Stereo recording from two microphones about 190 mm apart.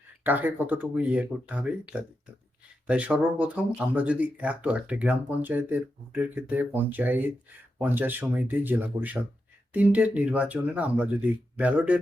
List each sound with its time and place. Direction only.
0.3 s speech: 10° right (ahead or behind)